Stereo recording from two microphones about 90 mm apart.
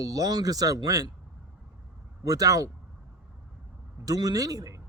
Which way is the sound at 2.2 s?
40° right (ahead or behind).